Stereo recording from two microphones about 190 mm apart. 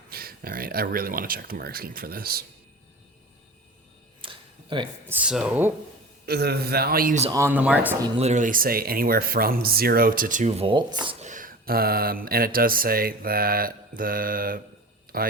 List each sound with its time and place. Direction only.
0.1 s mantra: 50° right (ahead or behind)
4.2 s a sound: 25° right (ahead or behind)
5.0 s speech: 5° right (ahead or behind)
6.2 s a man's voice: 55° right (ahead or behind)
7.3 s speech: 15° right (ahead or behind)
8.2 s mantra: 40° right (ahead or behind); by 11.2 s 25° right (ahead or behind)
11.2 s mantra: 45° right (ahead or behind)